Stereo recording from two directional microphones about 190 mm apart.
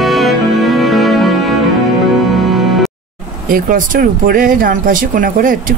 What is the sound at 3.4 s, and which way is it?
Speech, 45° right (ahead or behind).